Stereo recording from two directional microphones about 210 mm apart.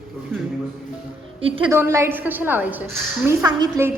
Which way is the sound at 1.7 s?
15° right (ahead or behind).